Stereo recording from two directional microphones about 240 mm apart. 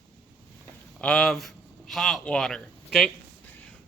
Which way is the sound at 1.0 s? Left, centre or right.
Centre.